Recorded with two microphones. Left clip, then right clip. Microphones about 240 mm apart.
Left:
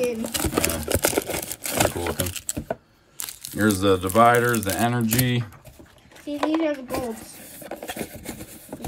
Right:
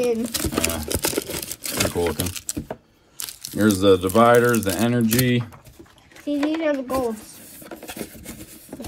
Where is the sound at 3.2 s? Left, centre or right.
Centre.